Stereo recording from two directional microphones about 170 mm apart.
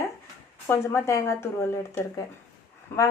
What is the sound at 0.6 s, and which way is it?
A woman's voice, 15° left (ahead or behind).